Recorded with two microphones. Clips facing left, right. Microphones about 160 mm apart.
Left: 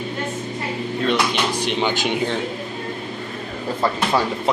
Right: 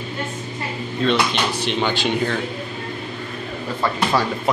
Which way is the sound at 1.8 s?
15° left (ahead or behind).